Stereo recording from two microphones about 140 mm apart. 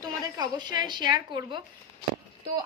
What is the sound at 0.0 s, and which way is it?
A woman's voice, 30° right (ahead or behind).